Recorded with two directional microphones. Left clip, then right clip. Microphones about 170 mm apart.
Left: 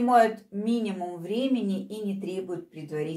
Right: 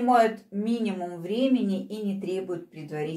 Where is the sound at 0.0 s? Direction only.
20° left (ahead or behind).